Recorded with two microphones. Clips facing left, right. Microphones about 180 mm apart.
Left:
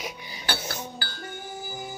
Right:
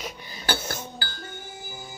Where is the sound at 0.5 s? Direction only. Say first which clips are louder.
Right 1 dB; 15° left (ahead or behind).